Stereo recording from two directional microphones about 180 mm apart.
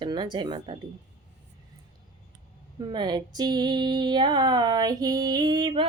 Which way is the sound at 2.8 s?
25° right (ahead or behind).